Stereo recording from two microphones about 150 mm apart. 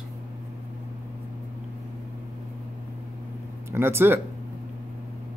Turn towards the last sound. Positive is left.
turn(degrees=-15)  # may be behind; listen again after turning